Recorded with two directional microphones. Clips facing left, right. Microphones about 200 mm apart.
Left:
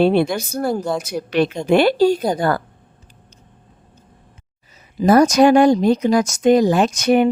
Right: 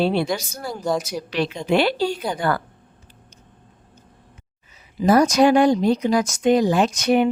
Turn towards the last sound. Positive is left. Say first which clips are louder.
# left 3 dB
turn(degrees=45)  # may be behind; listen again after turning